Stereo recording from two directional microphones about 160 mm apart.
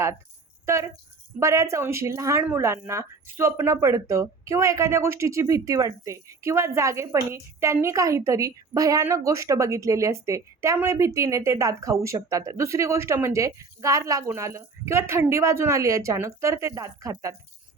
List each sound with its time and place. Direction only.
0.6 s speech: 15° right (ahead or behind)